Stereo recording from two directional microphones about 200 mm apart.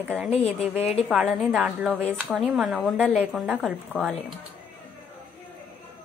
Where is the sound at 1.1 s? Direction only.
5° right (ahead or behind).